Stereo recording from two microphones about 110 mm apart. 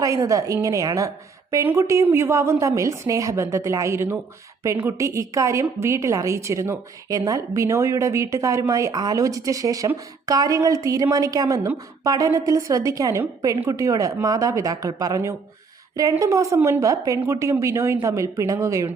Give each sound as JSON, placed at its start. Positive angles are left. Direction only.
{"t": 0.0, "sound": "a woman's voice", "side_deg": -30}